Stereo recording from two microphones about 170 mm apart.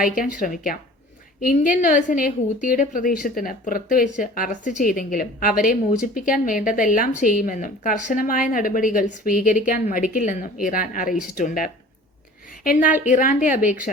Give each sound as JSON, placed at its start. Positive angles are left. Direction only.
{"t": 0.0, "sound": "a woman's voice", "side_deg": 55}